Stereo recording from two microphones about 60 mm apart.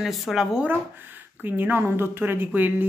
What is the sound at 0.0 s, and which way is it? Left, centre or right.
Speech, centre.